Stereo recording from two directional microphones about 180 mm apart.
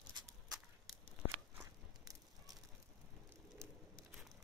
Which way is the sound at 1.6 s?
20° right (ahead or behind).